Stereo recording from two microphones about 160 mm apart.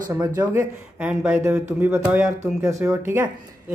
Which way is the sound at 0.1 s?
20° right (ahead or behind).